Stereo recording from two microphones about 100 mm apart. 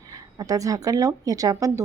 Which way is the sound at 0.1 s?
35° right (ahead or behind).